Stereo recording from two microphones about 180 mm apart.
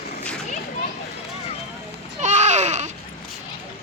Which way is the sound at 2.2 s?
40° right (ahead or behind).